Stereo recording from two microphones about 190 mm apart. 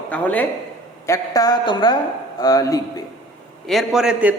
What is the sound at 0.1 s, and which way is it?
A woman's voice, 10° left (ahead or behind).